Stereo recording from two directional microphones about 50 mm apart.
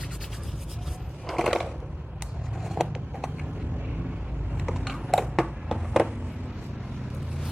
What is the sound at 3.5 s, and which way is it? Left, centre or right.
Vehicle, right.